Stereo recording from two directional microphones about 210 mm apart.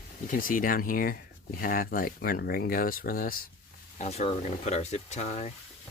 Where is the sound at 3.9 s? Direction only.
30° left (ahead or behind).